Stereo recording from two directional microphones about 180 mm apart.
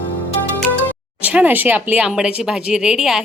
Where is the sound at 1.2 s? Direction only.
10° right (ahead or behind).